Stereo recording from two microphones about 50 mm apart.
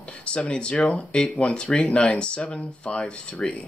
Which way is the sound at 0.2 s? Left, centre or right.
Left.